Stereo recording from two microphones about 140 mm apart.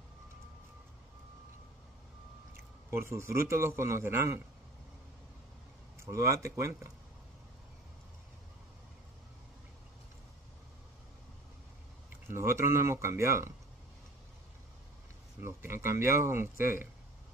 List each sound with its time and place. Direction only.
2.5 s a man's voice: 15° right (ahead or behind)
5.9 s speech: 20° right (ahead or behind)
12.3 s speech: 20° right (ahead or behind)
15.4 s speech: 15° right (ahead or behind)